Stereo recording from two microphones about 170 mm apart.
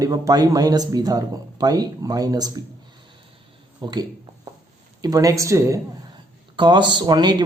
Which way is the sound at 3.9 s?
25° right (ahead or behind).